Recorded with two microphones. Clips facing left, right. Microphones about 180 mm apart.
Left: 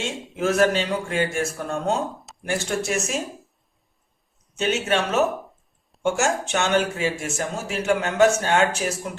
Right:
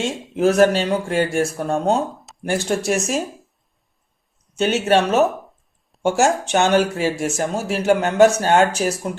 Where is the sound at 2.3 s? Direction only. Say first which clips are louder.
Even; centre (ahead or behind).